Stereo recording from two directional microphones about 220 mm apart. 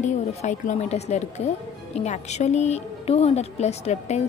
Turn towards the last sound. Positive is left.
turn(degrees=30)  # may be behind; listen again after turning